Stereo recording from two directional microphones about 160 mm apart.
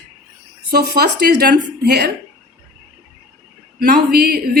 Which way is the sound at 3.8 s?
70° right (ahead or behind).